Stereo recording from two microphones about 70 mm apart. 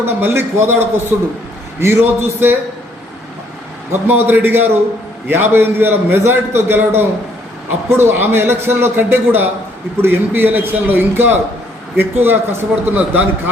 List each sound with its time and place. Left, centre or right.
0.0 s a man's voice: right
1.8 s a man's voice: right
3.9 s a man's voice: right